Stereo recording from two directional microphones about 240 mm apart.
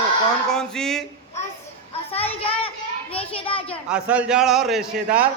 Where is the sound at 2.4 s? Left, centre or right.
Left.